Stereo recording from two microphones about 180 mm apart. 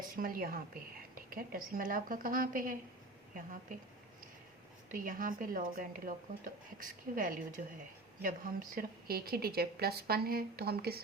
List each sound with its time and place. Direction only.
0.2 s speech: 55° right (ahead or behind)
4.9 s a woman's voice: 50° right (ahead or behind)